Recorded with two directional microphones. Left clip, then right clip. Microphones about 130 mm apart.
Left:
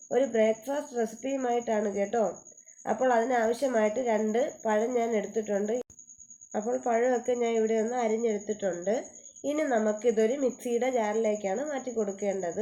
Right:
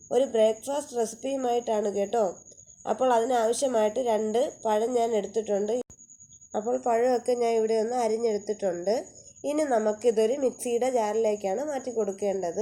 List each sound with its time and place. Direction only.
0.1 s speech: 30° right (ahead or behind)